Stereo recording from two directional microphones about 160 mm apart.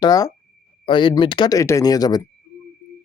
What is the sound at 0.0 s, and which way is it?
Speech, 20° left (ahead or behind).